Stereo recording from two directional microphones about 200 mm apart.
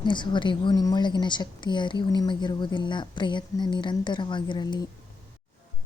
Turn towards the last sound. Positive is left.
turn(degrees=20)  # may be behind; listen again after turning